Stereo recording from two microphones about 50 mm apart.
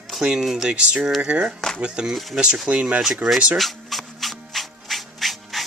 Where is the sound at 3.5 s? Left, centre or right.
Centre.